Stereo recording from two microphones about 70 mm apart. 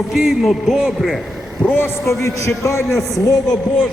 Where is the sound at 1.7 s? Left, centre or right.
Left.